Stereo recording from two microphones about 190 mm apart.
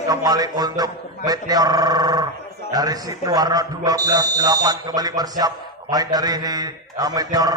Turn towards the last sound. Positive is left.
turn(degrees=-20)  # may be behind; listen again after turning